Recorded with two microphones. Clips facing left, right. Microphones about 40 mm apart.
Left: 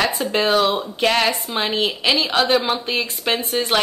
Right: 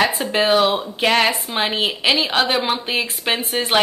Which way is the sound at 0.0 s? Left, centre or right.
Centre.